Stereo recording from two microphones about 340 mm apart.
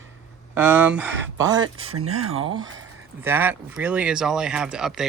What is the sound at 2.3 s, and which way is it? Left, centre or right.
Speech, centre.